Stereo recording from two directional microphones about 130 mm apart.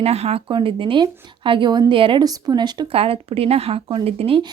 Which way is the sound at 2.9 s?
45° right (ahead or behind).